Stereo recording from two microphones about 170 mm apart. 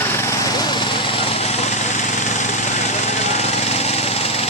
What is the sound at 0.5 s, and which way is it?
Lawn mower, 25° left (ahead or behind).